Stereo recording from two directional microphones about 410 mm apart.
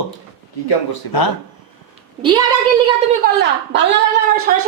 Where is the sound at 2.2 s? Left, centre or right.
Centre.